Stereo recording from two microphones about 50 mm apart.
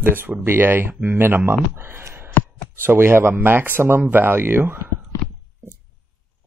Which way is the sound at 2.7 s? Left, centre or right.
Right.